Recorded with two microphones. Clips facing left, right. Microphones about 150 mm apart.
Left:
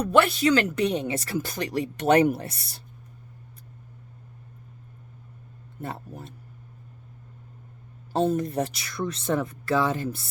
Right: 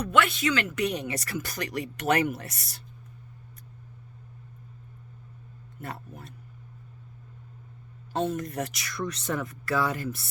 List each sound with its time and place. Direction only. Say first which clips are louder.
0.1 s speech: left 5 dB; 35° left (ahead or behind)
5.8 s speech: left 4 dB; 30° left (ahead or behind)
8.1 s speech: left 5 dB; 35° left (ahead or behind)